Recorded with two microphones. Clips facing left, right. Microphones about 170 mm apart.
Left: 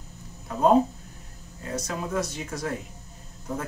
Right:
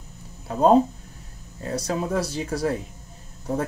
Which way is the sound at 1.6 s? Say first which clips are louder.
Right 5 dB; 35° right (ahead or behind).